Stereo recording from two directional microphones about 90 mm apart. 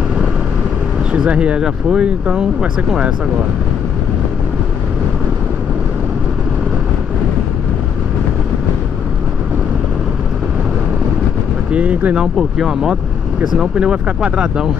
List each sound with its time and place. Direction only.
1.1 s speech: 10° right (ahead or behind)
11.7 s a sound: 15° right (ahead or behind)
12.4 s speech: 5° right (ahead or behind)